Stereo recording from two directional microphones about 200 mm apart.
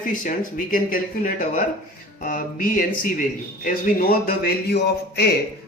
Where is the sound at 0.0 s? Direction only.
40° left (ahead or behind).